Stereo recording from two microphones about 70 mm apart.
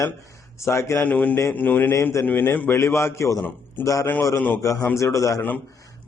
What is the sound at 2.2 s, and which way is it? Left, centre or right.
Speech, left.